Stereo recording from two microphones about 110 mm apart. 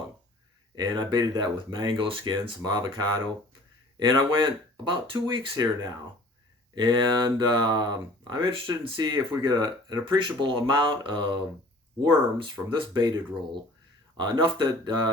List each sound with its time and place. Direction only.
0.8 s speech: 40° right (ahead or behind)
6.7 s speech: 45° right (ahead or behind)